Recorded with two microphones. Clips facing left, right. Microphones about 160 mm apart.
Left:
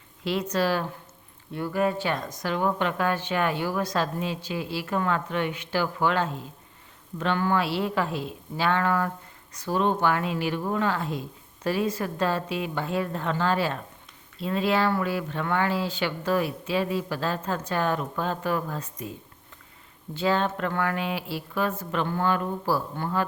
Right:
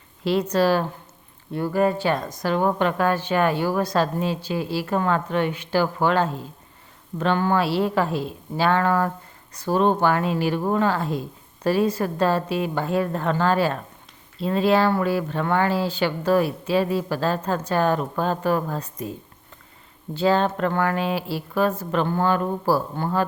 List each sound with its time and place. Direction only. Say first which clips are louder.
0.3 s a woman's voice: right 6 dB; 35° right (ahead or behind)
20.1 s a woman's voice: right 5 dB; 35° right (ahead or behind)